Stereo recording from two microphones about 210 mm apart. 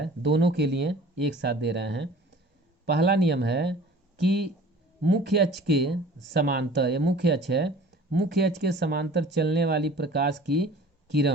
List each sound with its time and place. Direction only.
0.0 s speech: 55° right (ahead or behind)
5.0 s speech: 55° right (ahead or behind)